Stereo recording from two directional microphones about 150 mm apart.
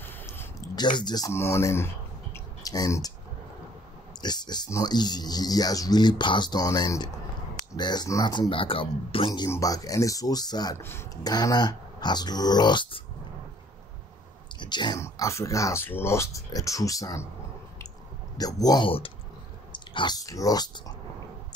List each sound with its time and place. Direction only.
0.0 s a sound: 15° left (ahead or behind)
0.7 s speech: 30° left (ahead or behind)
2.3 s clicking: 25° left (ahead or behind)
4.2 s speech: 30° left (ahead or behind)
10.8 s speech: 15° left (ahead or behind)
14.6 s speech: 30° left (ahead or behind)
15.0 s speech: 20° left (ahead or behind)
18.4 s speech: 25° left (ahead or behind)